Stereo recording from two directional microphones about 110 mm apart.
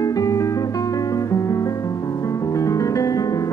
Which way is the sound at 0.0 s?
30° left (ahead or behind).